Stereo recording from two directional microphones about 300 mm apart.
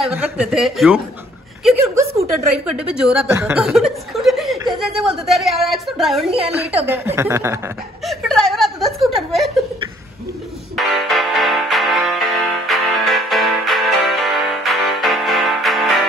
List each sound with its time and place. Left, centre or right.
0.0 s a woman's voice: centre
1.6 s a sound: centre
2.7 s a woman's voice: centre
6.9 s chuckle: centre
10.8 s music: centre